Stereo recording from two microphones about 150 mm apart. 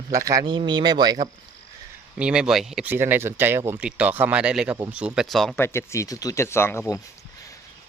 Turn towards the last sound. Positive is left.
turn(degrees=20)  # may be behind; listen again after turning